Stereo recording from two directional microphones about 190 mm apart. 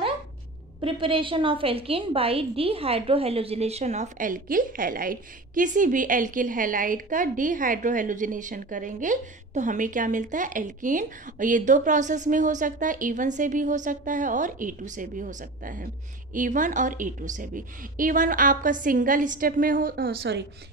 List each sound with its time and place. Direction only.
0.7 s a woman's voice: 25° right (ahead or behind); by 20.4 s 60° right (ahead or behind)